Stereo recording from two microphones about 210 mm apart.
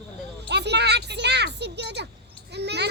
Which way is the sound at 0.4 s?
55° right (ahead or behind).